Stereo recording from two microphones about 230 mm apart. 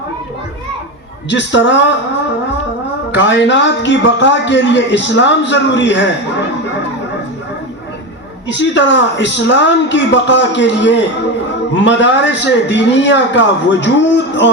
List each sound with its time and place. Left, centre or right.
1.3 s a man's voice: left
3.2 s a man's voice: left
8.4 s a man's voice: left